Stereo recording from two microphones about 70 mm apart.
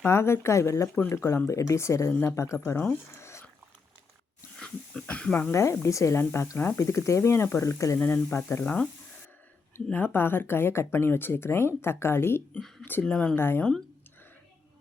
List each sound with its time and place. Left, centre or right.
0.0 s speech: left
3.2 s a sound: left
4.6 s speech: centre
5.5 s speech: left
7.9 s speech: left
8.6 s speech: left
12.8 s speech: left
13.3 s speech: left